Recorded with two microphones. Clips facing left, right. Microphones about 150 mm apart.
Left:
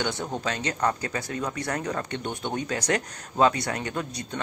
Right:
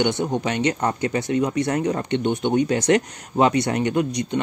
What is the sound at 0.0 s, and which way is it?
Speech, 20° right (ahead or behind).